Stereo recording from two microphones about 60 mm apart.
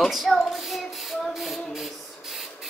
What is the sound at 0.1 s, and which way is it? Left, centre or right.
Child singing, centre.